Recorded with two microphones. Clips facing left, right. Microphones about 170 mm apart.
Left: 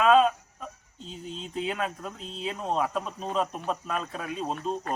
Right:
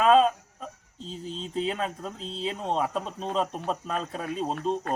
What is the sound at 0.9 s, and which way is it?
Speech, 35° right (ahead or behind).